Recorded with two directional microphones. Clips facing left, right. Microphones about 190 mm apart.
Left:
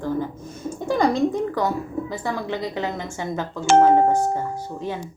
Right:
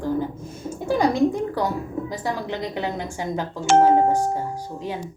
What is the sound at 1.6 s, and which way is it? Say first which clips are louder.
A woman's voice: left 1 dB; 15° right (ahead or behind).